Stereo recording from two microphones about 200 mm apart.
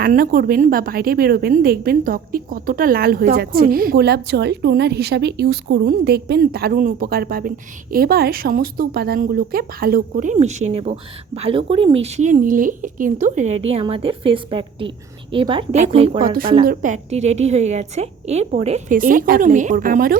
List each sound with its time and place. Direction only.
0.0 s a woman's voice: 45° right (ahead or behind)
13.7 s a woman's voice: 30° right (ahead or behind)
16.6 s a woman's voice: 40° right (ahead or behind)